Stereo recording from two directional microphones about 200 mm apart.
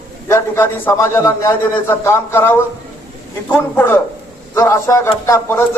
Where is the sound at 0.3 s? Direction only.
15° left (ahead or behind).